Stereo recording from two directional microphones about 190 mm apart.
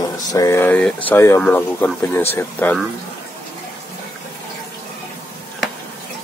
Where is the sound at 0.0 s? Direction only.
20° left (ahead or behind).